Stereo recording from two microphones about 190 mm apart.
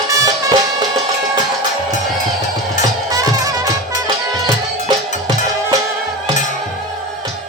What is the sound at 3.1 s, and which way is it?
Music, 20° right (ahead or behind).